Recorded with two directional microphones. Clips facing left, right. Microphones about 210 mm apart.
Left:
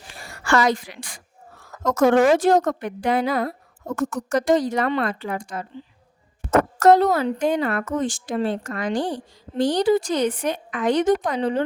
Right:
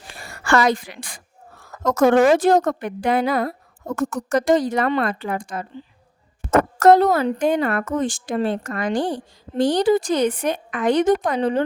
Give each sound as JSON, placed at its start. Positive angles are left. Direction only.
{"t": 0.2, "sound": "a woman's voice", "side_deg": -60}
{"t": 6.7, "sound": "a woman's voice", "side_deg": -55}